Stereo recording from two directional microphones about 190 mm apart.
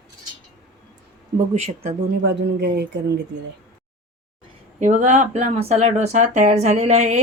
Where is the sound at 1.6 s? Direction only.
35° right (ahead or behind).